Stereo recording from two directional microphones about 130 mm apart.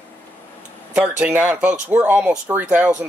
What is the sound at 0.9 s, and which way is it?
Speech, 10° right (ahead or behind).